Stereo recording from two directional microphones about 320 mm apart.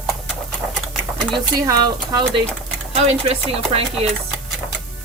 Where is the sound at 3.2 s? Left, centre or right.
Centre.